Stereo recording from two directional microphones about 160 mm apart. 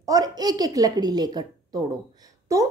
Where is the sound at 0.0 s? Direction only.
25° right (ahead or behind).